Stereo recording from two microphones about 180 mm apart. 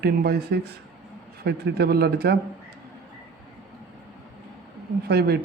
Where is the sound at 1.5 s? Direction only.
65° right (ahead or behind).